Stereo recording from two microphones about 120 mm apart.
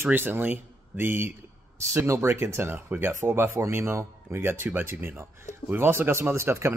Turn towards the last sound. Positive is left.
turn(degrees=-20)  # may be behind; listen again after turning